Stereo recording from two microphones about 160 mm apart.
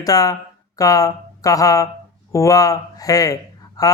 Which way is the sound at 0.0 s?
20° left (ahead or behind).